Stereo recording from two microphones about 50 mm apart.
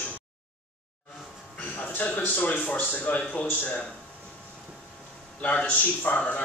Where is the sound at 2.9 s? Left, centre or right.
Left.